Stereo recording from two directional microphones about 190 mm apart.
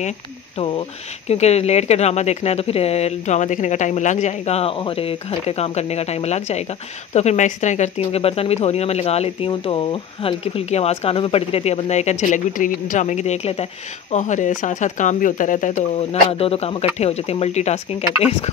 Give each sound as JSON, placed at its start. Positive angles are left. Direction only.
{"t": 0.6, "sound": "speech", "side_deg": 25}